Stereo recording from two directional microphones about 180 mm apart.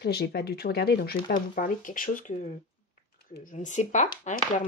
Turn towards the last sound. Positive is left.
turn(degrees=40)  # may be behind; listen again after turning